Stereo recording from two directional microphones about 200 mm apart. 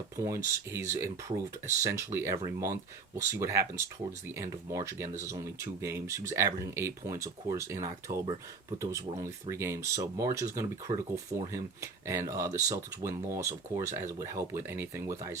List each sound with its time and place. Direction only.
0.2 s speech: 15° right (ahead or behind)